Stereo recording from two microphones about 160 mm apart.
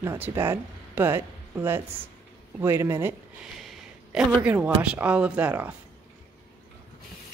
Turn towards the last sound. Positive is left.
turn(degrees=-10)  # may be behind; listen again after turning